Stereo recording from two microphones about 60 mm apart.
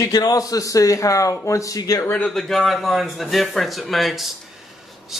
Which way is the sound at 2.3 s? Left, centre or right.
Centre.